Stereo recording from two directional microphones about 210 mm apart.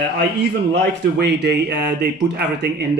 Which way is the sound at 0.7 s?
50° right (ahead or behind).